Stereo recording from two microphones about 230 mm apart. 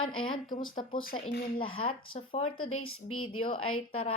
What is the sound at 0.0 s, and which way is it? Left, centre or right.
Speech, left.